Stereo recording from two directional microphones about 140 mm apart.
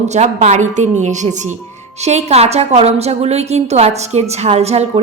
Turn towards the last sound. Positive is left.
turn(degrees=-50)  # may be behind; listen again after turning